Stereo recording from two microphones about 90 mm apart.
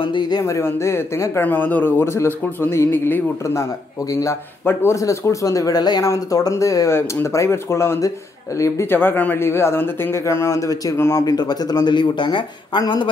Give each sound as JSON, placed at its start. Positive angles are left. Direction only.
{"t": 0.0, "sound": "speech", "side_deg": 60}
{"t": 0.4, "sound": "speech", "side_deg": 30}
{"t": 4.1, "sound": "speech", "side_deg": 40}
{"t": 6.9, "sound": "speech", "side_deg": 25}
{"t": 11.2, "sound": "speech", "side_deg": 50}